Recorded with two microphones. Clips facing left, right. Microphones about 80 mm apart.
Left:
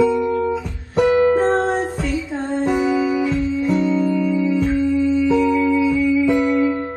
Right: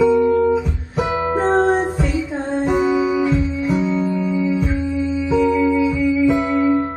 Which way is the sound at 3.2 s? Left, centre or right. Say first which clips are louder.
Right 1 dB; right.